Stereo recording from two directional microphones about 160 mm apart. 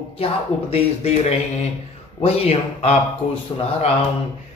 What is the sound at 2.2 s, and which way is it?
Speech, 40° left (ahead or behind).